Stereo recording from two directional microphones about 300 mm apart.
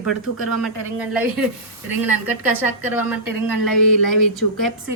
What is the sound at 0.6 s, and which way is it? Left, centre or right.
A woman's voice, centre.